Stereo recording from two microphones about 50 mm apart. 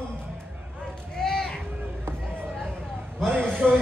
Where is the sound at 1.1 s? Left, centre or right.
Centre.